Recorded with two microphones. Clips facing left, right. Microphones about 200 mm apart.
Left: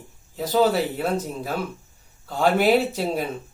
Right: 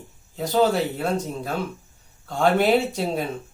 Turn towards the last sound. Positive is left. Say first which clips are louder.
# left 1 dB
turn(degrees=0)  # may be behind; listen again after turning